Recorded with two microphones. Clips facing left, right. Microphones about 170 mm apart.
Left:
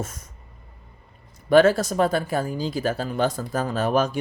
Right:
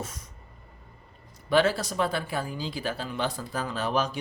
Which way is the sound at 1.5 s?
45° left (ahead or behind).